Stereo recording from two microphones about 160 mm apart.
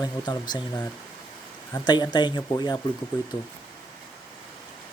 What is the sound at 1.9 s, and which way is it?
Speech, 30° left (ahead or behind).